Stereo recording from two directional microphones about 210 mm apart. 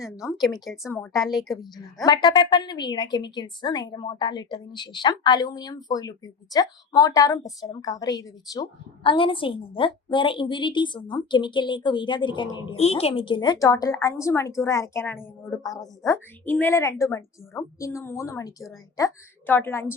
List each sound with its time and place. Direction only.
0.4 s a woman's voice: centre (ahead or behind)
0.9 s a woman's voice: 10° left (ahead or behind)
1.1 s a woman's voice: centre (ahead or behind)
2.0 s a woman's voice: 20° left (ahead or behind)